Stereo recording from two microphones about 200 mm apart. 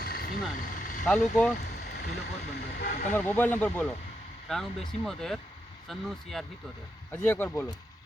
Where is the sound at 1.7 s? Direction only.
55° left (ahead or behind).